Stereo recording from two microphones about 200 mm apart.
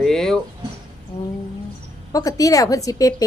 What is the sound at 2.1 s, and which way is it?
Speech, 15° left (ahead or behind).